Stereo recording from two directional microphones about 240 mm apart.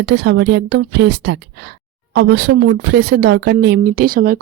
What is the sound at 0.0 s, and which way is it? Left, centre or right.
A woman's voice, right.